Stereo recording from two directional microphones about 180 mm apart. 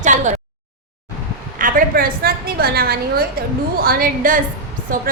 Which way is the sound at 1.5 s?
50° right (ahead or behind).